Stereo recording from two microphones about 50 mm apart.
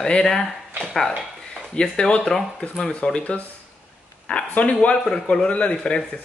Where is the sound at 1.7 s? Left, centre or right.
Centre.